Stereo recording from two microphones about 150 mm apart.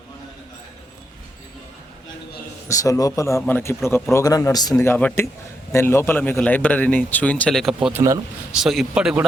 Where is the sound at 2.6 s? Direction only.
20° left (ahead or behind).